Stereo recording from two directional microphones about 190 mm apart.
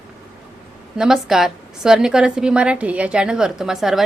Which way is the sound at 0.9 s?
Centre (ahead or behind).